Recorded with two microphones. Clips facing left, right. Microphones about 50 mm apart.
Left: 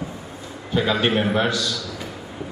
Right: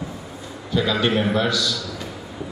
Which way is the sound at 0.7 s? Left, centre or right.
Left.